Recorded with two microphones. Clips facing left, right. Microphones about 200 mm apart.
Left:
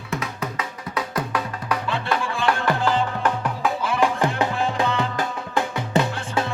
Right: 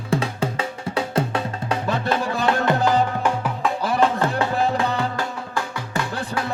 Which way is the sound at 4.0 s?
15° left (ahead or behind).